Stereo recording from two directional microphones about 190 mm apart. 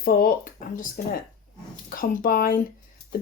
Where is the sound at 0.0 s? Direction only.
50° left (ahead or behind).